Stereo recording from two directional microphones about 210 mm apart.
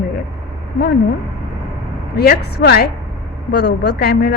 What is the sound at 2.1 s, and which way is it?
A woman's voice, 50° left (ahead or behind).